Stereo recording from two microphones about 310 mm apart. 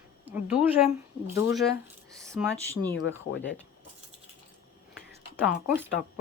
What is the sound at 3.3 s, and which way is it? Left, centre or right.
Speech, left.